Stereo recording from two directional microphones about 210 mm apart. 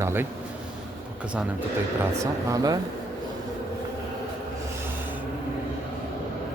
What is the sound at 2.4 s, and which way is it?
Speech, 15° right (ahead or behind).